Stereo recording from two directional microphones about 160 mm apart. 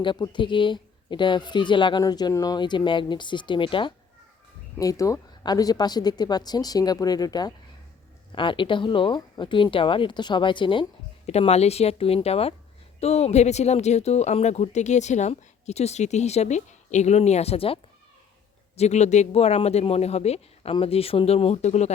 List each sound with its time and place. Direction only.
0.0 s speech: 30° left (ahead or behind)
4.8 s speech: 20° left (ahead or behind)
11.3 s speech: 40° left (ahead or behind)
18.8 s speech: 45° left (ahead or behind)